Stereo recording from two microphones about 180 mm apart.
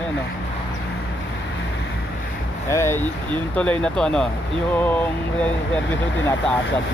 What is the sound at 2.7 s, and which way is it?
Speech, 15° left (ahead or behind).